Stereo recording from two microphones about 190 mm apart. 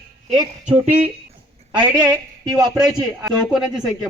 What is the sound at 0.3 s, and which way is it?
Speech, 40° right (ahead or behind).